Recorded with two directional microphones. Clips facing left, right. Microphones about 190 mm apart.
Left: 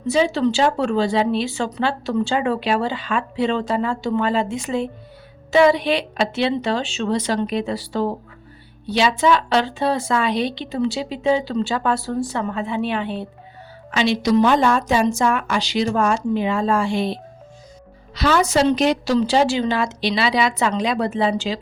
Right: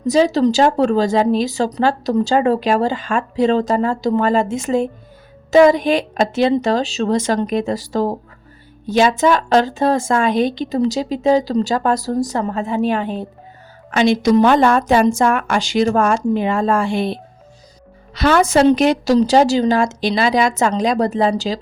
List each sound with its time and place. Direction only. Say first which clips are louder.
0.0 s a woman's voice: right 4 dB; 40° right (ahead or behind)